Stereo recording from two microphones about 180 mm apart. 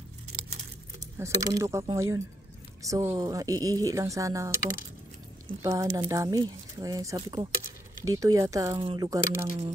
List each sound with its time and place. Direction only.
1.1 s speech: 15° right (ahead or behind)